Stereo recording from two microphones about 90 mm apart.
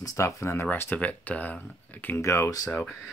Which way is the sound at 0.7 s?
20° left (ahead or behind).